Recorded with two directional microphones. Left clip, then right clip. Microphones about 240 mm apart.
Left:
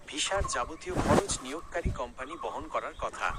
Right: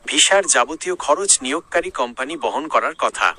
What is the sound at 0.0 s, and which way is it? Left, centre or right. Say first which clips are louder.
Speech: right 16 dB; right.